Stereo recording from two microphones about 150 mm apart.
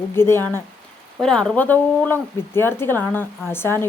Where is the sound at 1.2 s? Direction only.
5° left (ahead or behind).